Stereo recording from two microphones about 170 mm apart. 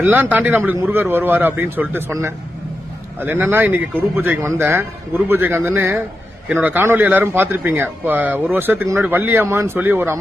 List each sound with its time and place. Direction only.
0.0 s speech: 10° right (ahead or behind)